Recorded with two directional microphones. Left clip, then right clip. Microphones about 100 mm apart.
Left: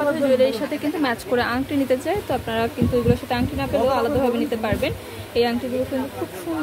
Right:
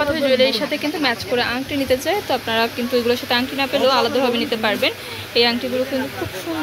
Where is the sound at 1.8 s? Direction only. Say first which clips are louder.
Right 4 dB; 20° left (ahead or behind).